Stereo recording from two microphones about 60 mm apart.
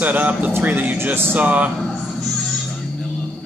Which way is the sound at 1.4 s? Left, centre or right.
Right.